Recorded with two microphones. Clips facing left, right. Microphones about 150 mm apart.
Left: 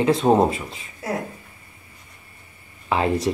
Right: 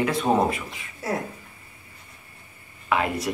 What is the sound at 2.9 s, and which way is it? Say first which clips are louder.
Speech: left 2 dB; 30° left (ahead or behind).